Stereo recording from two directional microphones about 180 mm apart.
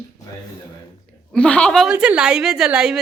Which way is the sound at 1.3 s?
5° left (ahead or behind).